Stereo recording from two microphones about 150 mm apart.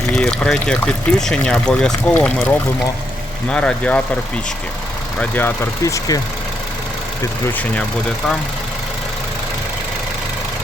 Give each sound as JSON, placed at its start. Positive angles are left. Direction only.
{"t": 0.1, "sound": "speech", "side_deg": 5}
{"t": 5.2, "sound": "speech", "side_deg": 15}